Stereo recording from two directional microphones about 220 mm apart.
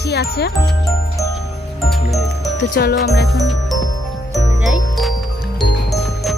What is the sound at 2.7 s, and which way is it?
Speech, 45° left (ahead or behind).